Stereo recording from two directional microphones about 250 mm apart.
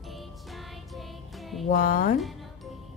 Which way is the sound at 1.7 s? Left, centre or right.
Left.